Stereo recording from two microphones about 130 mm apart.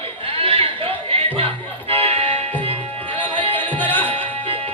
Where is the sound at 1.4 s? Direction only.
45° right (ahead or behind).